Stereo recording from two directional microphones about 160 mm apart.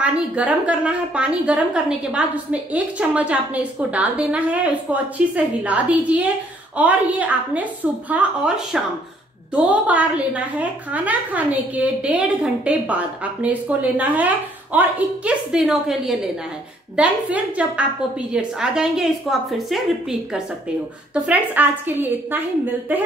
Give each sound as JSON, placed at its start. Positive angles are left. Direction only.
{"t": 0.0, "sound": "a woman's voice", "side_deg": -10}